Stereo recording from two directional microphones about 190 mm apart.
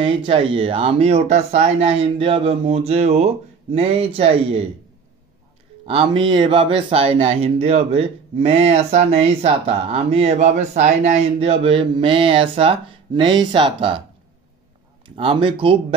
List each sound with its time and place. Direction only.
0.0 s speech: 30° right (ahead or behind)
5.9 s speech: 30° right (ahead or behind)
15.0 s speech: 30° right (ahead or behind)